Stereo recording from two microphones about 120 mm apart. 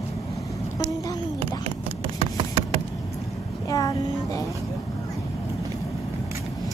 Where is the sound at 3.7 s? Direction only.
30° left (ahead or behind).